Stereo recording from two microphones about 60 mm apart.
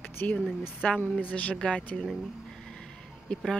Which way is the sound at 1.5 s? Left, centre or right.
Centre.